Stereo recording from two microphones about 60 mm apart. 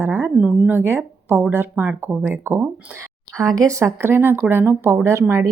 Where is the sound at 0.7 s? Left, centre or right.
Right.